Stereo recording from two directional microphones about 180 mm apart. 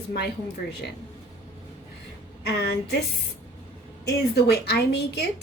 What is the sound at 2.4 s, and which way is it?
Speech, 65° left (ahead or behind).